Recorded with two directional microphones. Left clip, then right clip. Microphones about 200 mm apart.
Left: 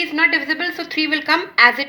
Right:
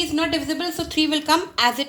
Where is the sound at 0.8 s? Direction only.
65° right (ahead or behind).